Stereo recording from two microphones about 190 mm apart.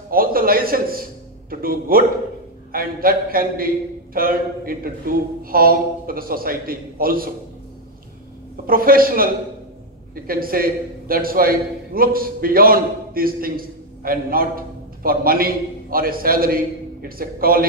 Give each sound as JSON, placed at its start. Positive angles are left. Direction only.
{"t": 0.1, "sound": "a sound", "side_deg": -50}
{"t": 1.5, "sound": "a man's voice", "side_deg": -50}
{"t": 8.6, "sound": "a man's voice", "side_deg": -50}